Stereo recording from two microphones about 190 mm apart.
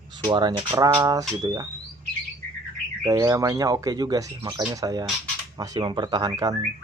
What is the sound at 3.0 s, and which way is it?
Speech, 20° right (ahead or behind).